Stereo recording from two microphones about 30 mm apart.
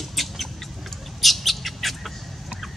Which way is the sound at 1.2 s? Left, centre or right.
Centre.